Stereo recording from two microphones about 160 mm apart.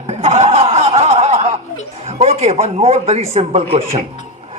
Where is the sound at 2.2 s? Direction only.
40° right (ahead or behind).